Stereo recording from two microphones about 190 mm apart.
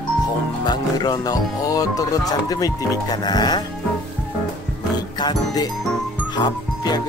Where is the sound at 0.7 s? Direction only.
20° left (ahead or behind).